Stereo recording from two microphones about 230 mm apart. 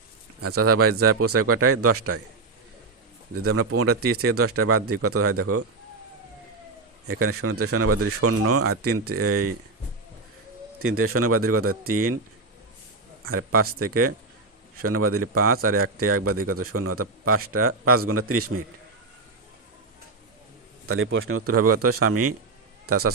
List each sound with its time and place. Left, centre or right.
0.4 s a man's voice: right
3.3 s a man's voice: right
7.1 s a man's voice: right
10.8 s a man's voice: right
13.2 s a man's voice: right
20.8 s a man's voice: right